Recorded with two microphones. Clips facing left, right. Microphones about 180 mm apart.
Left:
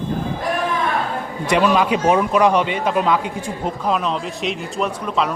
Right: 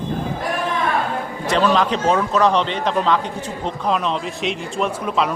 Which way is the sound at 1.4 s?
10° left (ahead or behind).